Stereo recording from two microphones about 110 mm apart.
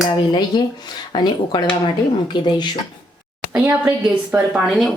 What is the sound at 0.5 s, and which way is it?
Speech, 40° left (ahead or behind).